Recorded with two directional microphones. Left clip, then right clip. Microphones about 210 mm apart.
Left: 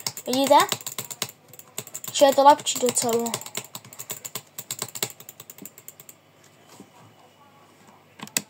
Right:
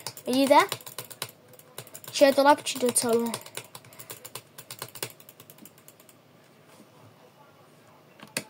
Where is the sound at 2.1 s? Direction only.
50° right (ahead or behind).